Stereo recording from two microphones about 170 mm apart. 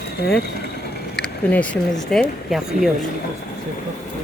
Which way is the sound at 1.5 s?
10° left (ahead or behind).